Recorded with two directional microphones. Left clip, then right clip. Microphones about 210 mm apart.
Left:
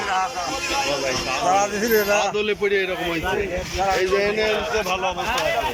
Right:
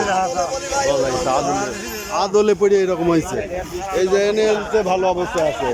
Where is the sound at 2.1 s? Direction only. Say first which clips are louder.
Right 5 dB; 25° right (ahead or behind).